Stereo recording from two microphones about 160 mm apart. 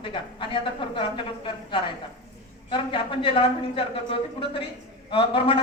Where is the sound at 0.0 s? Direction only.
30° left (ahead or behind).